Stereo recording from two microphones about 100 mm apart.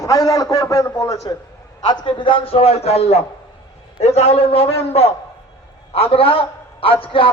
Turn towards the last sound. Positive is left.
turn(degrees=65)  # may be behind; listen again after turning